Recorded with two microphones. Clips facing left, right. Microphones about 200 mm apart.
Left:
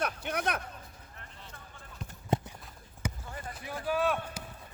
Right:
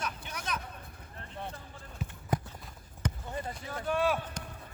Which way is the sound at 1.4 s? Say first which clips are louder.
Right 15 dB; 60° right (ahead or behind).